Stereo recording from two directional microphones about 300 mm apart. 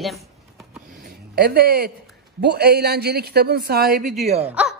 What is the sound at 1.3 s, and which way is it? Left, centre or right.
A woman's voice, right.